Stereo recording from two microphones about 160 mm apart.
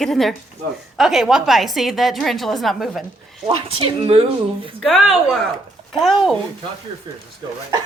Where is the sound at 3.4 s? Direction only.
35° right (ahead or behind).